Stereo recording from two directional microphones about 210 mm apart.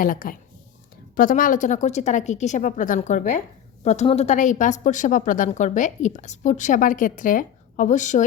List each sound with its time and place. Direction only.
0.0 s a woman's voice: 40° left (ahead or behind)